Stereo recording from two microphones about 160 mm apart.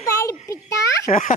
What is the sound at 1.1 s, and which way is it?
Speech, 50° left (ahead or behind).